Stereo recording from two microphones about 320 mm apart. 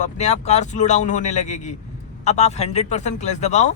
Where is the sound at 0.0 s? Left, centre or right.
Left.